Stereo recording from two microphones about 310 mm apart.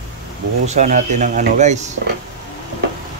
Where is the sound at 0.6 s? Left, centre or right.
Right.